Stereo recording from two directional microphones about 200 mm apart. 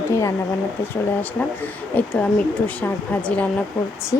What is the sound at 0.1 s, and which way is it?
Speech, 15° left (ahead or behind).